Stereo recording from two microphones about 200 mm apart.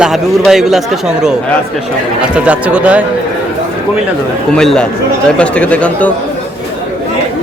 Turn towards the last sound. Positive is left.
turn(degrees=5)  # may be behind; listen again after turning